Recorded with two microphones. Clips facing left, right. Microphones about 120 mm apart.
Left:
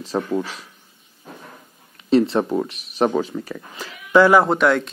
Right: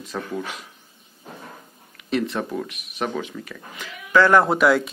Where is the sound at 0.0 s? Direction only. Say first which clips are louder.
Left 6 dB; 30° left (ahead or behind).